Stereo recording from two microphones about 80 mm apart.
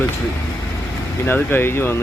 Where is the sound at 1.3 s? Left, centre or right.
Left.